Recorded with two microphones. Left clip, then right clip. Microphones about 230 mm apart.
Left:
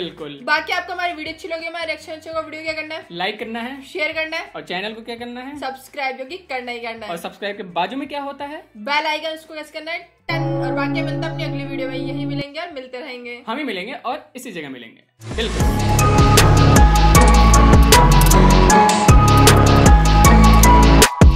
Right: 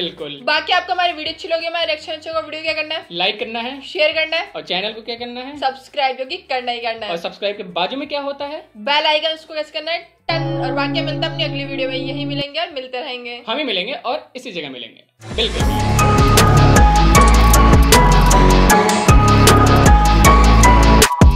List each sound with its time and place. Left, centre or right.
0.0 s a woman's voice: left
10.3 s music: centre
11.1 s a woman's voice: left
15.5 s music: centre